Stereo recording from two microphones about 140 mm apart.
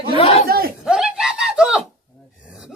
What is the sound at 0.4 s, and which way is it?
Chuckle, 90° right.